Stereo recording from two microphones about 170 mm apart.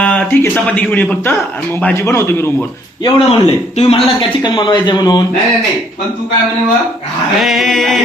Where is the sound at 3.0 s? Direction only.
35° left (ahead or behind).